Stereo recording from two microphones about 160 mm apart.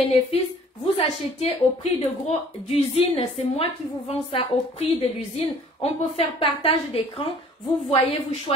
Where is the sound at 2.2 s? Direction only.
40° left (ahead or behind).